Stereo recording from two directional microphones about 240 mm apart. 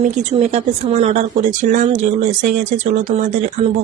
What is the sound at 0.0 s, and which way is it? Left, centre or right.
Speech, right.